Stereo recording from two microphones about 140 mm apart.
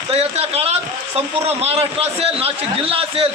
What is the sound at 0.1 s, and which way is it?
A man's voice, 45° right (ahead or behind).